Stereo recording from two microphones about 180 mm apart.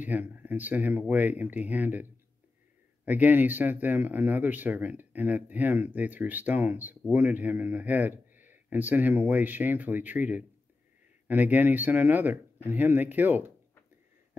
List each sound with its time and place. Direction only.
0.0 s speech: 10° right (ahead or behind)
3.1 s speech: 10° right (ahead or behind)